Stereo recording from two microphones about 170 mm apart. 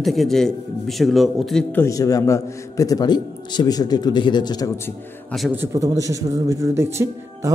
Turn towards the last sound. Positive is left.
turn(degrees=-15)  # may be behind; listen again after turning